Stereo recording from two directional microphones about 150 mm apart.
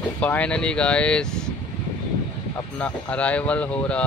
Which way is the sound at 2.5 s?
10° left (ahead or behind).